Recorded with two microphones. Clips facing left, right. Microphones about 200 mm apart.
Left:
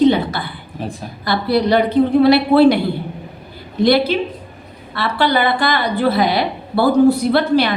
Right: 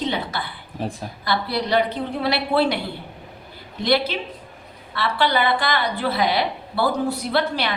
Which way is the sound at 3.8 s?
40° left (ahead or behind).